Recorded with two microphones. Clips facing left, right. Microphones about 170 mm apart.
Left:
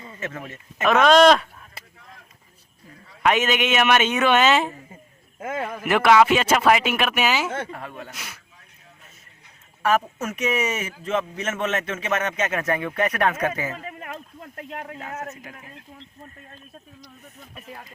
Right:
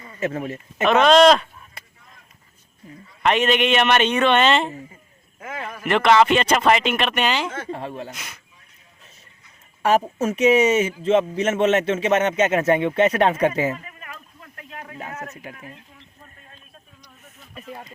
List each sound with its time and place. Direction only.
0.2 s speech: 30° right (ahead or behind)
0.9 s speech: centre (ahead or behind)
3.2 s speech: centre (ahead or behind)
5.4 s a man's voice: 50° left (ahead or behind)
5.8 s speech: 5° left (ahead or behind)
7.7 s a man's voice: 30° right (ahead or behind)
8.1 s speech: centre (ahead or behind)
9.8 s a man's voice: 30° right (ahead or behind)
13.7 s a sound: 60° left (ahead or behind)
15.5 s a man's voice: 30° right (ahead or behind)